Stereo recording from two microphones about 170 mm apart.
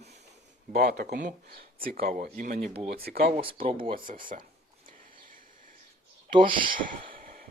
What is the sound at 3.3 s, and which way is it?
Speech, 35° right (ahead or behind).